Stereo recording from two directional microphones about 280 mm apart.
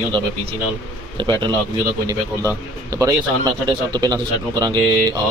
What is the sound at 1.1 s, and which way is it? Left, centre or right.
A man's voice, centre.